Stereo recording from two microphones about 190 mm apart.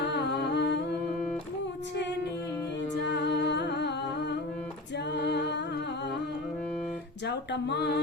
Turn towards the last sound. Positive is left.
turn(degrees=60)  # may be behind; listen again after turning